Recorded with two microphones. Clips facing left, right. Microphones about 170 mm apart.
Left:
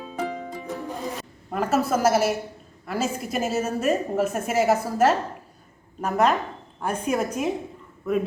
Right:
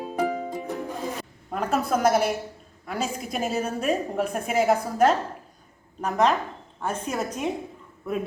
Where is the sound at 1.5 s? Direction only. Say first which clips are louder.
Left 2 dB; 5° left (ahead or behind).